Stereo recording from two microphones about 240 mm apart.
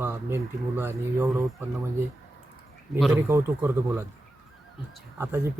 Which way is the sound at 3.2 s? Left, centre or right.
Centre.